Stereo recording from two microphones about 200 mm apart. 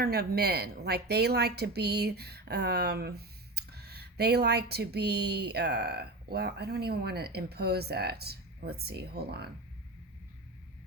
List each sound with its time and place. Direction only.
0.0 s a woman's voice: 50° right (ahead or behind)